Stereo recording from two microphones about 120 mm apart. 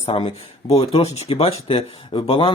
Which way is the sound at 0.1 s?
50° left (ahead or behind).